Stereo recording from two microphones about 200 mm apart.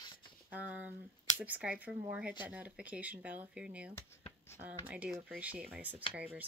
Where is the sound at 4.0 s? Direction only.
10° left (ahead or behind).